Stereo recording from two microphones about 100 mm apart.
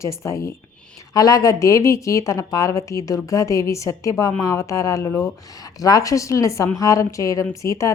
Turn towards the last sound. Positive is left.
turn(degrees=30)  # may be behind; listen again after turning